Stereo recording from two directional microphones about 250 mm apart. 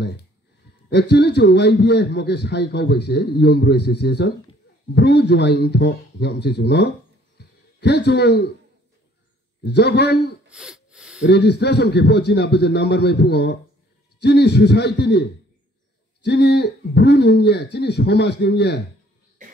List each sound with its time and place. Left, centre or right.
0.8 s a man's voice: left
7.3 s a sound: left
9.7 s a man's voice: left
10.5 s gasp: centre
11.2 s a man's voice: left